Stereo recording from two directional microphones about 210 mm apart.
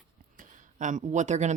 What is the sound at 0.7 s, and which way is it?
Speech, 35° right (ahead or behind).